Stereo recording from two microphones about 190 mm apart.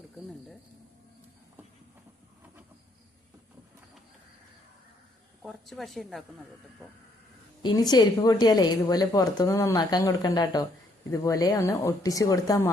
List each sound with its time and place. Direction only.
5.4 s a woman's voice: centre (ahead or behind)
7.6 s a woman's voice: 20° left (ahead or behind)